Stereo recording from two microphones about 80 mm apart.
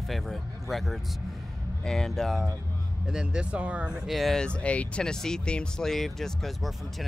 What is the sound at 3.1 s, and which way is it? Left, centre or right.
Speech, centre.